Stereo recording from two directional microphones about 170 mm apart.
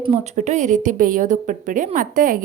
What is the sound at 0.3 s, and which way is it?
A woman's voice, 45° right (ahead or behind).